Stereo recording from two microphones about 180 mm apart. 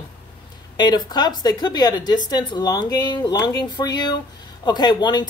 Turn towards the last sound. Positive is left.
turn(degrees=25)  # may be behind; listen again after turning